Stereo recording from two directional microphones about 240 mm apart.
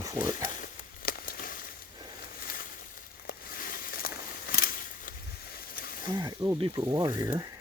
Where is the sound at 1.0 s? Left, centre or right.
Left.